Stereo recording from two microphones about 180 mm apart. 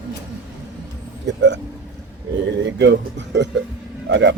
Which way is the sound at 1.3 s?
75° right (ahead or behind).